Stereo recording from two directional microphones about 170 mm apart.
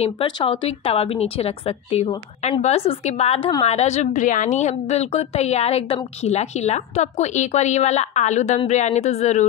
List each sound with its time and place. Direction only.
0.0 s a woman's voice: 30° left (ahead or behind)